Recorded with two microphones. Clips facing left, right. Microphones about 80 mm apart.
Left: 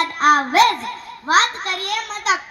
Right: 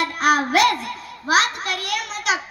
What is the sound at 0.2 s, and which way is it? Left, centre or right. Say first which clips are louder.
Music: left 3 dB; left.